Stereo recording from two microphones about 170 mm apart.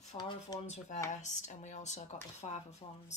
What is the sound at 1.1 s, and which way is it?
Speech, 45° left (ahead or behind).